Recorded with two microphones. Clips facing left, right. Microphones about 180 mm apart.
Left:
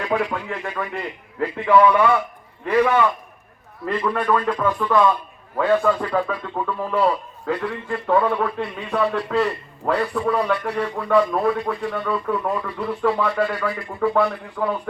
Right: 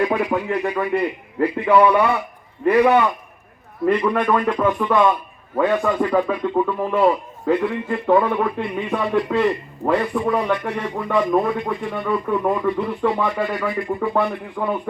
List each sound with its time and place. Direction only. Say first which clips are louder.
0.0 s a man's voice: right 4 dB; 15° right (ahead or behind)